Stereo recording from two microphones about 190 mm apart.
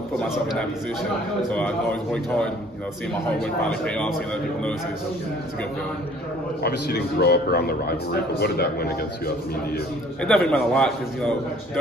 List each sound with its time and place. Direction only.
0.2 s a man's voice: 5° left (ahead or behind)
3.8 s a man's voice: 5° left (ahead or behind)
6.6 s a man's voice: 55° left (ahead or behind)
10.2 s a man's voice: 5° left (ahead or behind)